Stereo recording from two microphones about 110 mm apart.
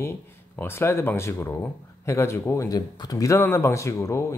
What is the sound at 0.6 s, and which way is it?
Speech, 20° left (ahead or behind).